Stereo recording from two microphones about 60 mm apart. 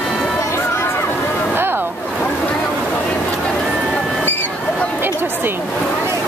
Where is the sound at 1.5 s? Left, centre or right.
Right.